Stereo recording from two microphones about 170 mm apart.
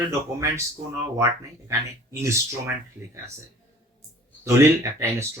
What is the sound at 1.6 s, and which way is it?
Speech, 15° right (ahead or behind).